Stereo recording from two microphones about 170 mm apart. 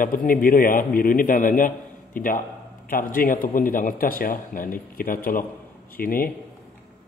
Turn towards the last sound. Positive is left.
turn(degrees=60)  # may be behind; listen again after turning